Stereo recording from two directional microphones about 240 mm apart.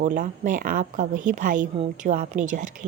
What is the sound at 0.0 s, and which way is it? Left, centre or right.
A woman's voice, right.